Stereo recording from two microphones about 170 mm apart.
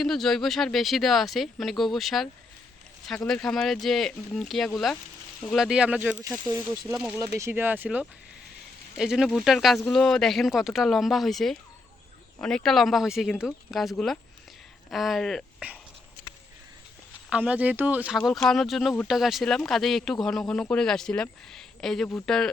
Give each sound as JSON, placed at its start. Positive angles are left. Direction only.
{"t": 0.0, "sound": "speech", "side_deg": 5}
{"t": 17.2, "sound": "speech", "side_deg": -5}
{"t": 18.2, "sound": "speech", "side_deg": 5}